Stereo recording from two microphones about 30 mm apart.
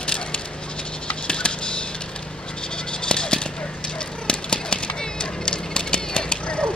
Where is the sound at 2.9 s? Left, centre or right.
Left.